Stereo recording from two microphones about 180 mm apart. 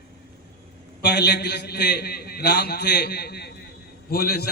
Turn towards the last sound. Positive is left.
turn(degrees=60)  # may be behind; listen again after turning